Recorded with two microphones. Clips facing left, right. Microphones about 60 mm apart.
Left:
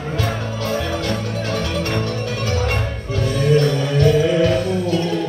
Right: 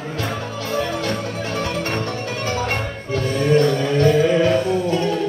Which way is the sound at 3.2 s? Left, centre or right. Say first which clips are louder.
Even; right.